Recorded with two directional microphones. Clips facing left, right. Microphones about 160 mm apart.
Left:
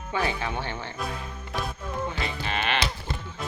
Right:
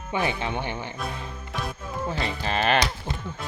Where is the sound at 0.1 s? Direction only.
20° right (ahead or behind).